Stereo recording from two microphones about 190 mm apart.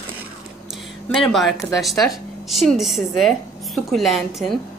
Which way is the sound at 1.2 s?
Centre (ahead or behind).